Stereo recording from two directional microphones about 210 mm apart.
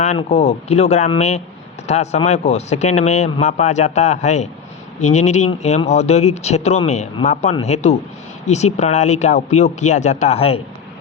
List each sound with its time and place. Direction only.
0.0 s speech: 30° left (ahead or behind)